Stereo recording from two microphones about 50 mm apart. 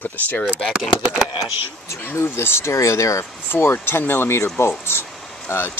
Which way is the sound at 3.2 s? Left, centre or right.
Left.